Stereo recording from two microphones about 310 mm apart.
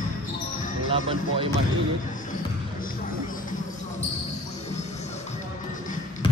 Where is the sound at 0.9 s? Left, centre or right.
Centre.